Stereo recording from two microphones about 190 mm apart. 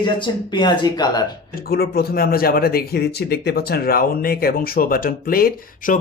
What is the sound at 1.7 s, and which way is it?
Speech, 55° left (ahead or behind).